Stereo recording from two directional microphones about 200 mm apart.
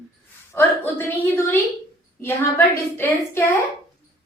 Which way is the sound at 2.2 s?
10° left (ahead or behind).